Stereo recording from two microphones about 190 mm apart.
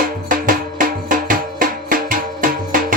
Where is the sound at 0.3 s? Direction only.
45° right (ahead or behind).